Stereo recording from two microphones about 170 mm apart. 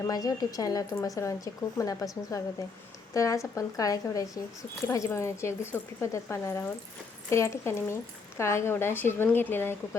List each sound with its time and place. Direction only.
0.0 s a woman's voice: 20° left (ahead or behind)